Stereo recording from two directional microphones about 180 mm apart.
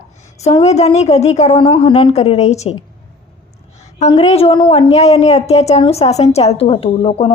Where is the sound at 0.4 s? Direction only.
35° left (ahead or behind).